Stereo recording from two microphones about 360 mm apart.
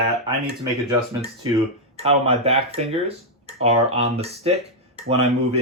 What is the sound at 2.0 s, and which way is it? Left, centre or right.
Speech, centre.